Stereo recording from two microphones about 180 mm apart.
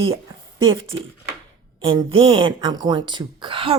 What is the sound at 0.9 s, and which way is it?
Speech, 25° right (ahead or behind).